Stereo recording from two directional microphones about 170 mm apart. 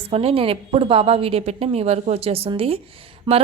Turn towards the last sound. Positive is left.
turn(degrees=-25)  # may be behind; listen again after turning